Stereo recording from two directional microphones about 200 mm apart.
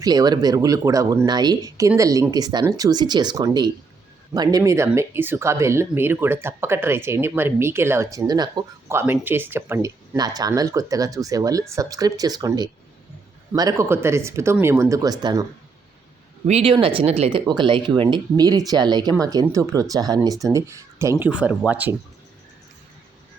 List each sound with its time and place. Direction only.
0.0 s speech: 20° right (ahead or behind)
16.5 s speech: 30° right (ahead or behind); by 21.9 s 10° right (ahead or behind)